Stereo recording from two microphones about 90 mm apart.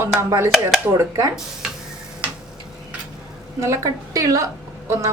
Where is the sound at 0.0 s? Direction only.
30° right (ahead or behind).